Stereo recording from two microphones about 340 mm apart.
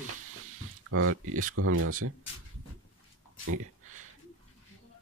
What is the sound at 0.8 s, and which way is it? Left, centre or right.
Speech, right.